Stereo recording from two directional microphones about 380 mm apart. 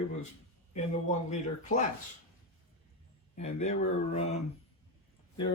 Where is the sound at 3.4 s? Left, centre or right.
Centre.